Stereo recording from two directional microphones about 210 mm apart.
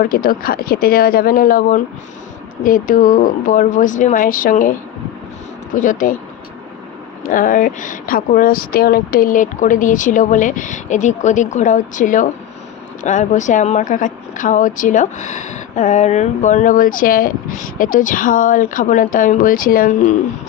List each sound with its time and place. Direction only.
0.0 s speech: 45° left (ahead or behind)
5.7 s speech: 40° left (ahead or behind)
7.2 s speech: 40° left (ahead or behind)